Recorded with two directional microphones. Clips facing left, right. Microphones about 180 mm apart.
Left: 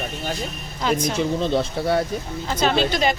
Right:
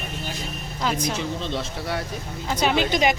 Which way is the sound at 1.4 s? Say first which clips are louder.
Left 7 dB; 35° left (ahead or behind).